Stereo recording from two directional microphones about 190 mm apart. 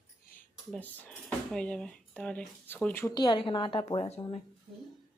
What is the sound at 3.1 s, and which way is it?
A woman's voice, 25° left (ahead or behind).